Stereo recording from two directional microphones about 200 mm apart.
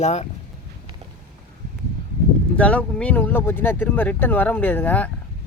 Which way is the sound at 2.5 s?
5° left (ahead or behind).